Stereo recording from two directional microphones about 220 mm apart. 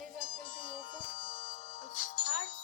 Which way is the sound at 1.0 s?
25° left (ahead or behind).